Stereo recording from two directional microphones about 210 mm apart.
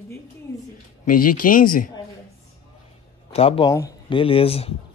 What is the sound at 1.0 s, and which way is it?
Speech, 40° left (ahead or behind).